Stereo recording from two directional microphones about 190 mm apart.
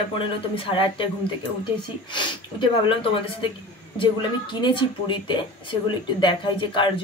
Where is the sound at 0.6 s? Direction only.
30° left (ahead or behind).